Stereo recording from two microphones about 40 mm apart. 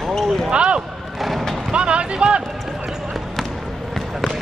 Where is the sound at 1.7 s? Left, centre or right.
Right.